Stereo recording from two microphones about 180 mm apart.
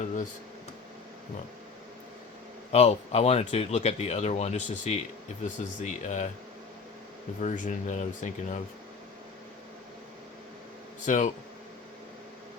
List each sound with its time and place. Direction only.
2.7 s speech: 35° left (ahead or behind)
7.3 s speech: 45° left (ahead or behind)
11.0 s speech: 45° left (ahead or behind)